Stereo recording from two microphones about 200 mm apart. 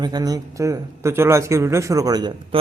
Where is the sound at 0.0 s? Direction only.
20° right (ahead or behind).